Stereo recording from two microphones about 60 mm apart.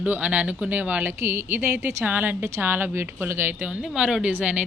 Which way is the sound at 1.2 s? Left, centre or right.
Right.